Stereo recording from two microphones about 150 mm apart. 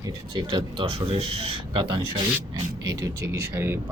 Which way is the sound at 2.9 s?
20° right (ahead or behind).